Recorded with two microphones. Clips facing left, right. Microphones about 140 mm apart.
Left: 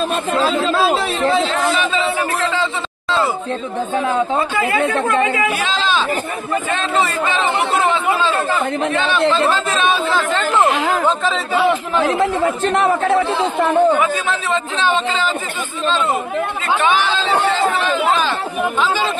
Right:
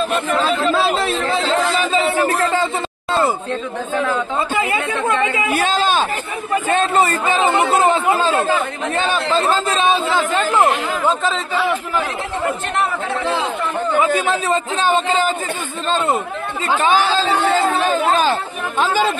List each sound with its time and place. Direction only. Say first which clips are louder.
0.7 s a sound: left 1 dB; centre (ahead or behind)
1.5 s a sound: right 1 dB; 35° right (ahead or behind)
4.6 s speech: left 3 dB; 20° right (ahead or behind)
5.5 s a man's voice: right 2 dB; 50° right (ahead or behind)
9.0 s speech: left 1 dB; 40° right (ahead or behind)
10.1 s speech: even; 10° right (ahead or behind)
13.6 s speech: left 8 dB; 60° left (ahead or behind)
13.9 s speech: right 2 dB; 30° right (ahead or behind)
16.7 s speech: right 1 dB; 35° right (ahead or behind)
18.8 s speech: right 4 dB; 45° right (ahead or behind)